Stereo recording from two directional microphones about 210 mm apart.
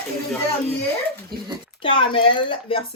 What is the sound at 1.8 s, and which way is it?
Speech, 25° left (ahead or behind).